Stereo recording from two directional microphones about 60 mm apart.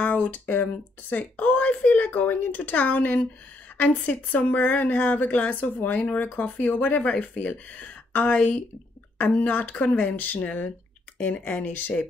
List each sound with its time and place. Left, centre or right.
0.0 s speech: left